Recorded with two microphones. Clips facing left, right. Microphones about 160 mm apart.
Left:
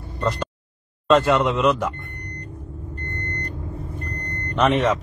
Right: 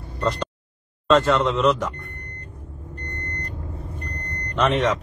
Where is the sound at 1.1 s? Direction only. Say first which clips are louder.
Left 1 dB; 10° left (ahead or behind).